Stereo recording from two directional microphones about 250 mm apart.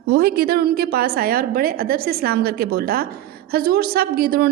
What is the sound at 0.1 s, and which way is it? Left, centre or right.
Speech, right.